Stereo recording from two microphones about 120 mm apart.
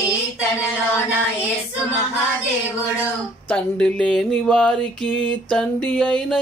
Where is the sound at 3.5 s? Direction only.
10° left (ahead or behind).